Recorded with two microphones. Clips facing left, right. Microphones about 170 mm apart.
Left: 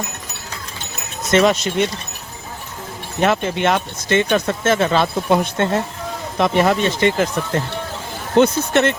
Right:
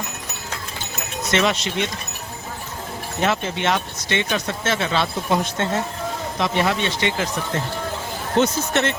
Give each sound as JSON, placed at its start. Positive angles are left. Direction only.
{"t": 1.3, "sound": "speech", "side_deg": 45}
{"t": 3.2, "sound": "speech", "side_deg": 50}
{"t": 8.4, "sound": "speech", "side_deg": 55}